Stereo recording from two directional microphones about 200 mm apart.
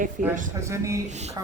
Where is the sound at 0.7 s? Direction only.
15° right (ahead or behind).